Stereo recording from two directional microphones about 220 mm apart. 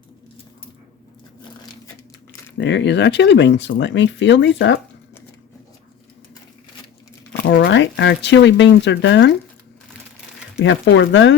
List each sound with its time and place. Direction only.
2.6 s speech: 55° left (ahead or behind)
7.3 s speech: 50° left (ahead or behind)
10.6 s speech: 55° left (ahead or behind)